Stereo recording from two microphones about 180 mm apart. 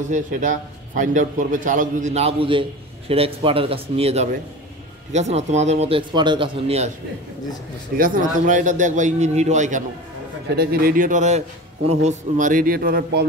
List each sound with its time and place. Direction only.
0.1 s a man's voice: 45° right (ahead or behind)
8.0 s a man's voice: 45° right (ahead or behind)
10.5 s a man's voice: 60° right (ahead or behind)